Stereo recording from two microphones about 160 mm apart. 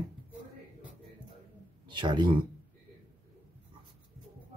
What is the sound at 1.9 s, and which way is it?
Speech, 30° right (ahead or behind).